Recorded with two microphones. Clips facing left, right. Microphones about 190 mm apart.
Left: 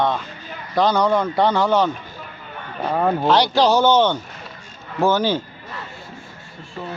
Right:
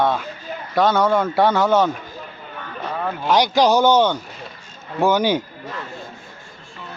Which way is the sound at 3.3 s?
15° right (ahead or behind).